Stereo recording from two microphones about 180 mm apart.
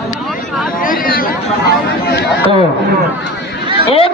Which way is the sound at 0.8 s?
50° left (ahead or behind).